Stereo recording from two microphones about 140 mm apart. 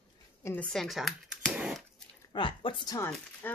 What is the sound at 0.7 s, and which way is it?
Speech, centre (ahead or behind).